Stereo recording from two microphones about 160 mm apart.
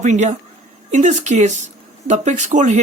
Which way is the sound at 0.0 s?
45° right (ahead or behind).